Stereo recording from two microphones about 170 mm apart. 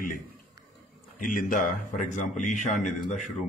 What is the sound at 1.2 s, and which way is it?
Speech, 55° left (ahead or behind).